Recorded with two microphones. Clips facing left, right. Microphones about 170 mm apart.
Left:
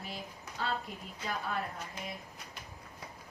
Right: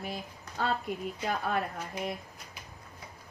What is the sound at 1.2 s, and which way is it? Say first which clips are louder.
Speech: right 5 dB; 60° right (ahead or behind).